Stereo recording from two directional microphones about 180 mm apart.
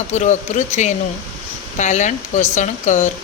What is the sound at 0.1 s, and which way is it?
Speech, 40° left (ahead or behind).